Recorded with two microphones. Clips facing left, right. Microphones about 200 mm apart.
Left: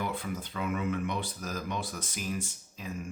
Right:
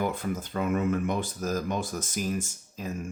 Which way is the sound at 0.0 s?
45° right (ahead or behind).